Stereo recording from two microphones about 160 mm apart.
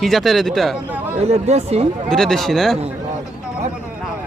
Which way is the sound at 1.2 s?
45° right (ahead or behind).